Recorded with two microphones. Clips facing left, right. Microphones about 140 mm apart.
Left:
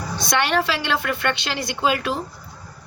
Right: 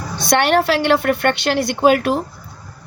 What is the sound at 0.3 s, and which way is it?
A woman's voice, 60° right (ahead or behind).